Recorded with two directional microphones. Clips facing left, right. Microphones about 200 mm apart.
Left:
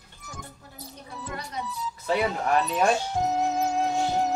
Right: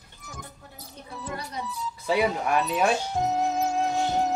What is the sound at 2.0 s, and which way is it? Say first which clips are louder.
Speech: right 1 dB; 10° right (ahead or behind).